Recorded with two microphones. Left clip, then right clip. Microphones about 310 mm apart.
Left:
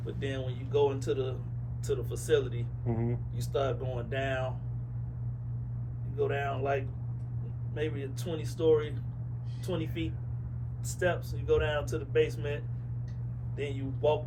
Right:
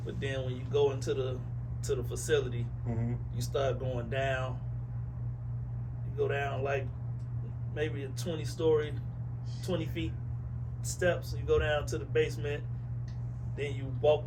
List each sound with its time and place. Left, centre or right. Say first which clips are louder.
0.0 s speech: even; centre
2.8 s speech: left 5 dB; left
3.3 s speech: even; centre
6.1 s speech: left 1 dB; centre